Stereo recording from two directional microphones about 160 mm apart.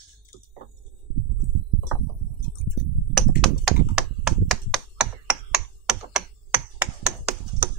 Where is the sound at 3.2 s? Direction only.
5° left (ahead or behind).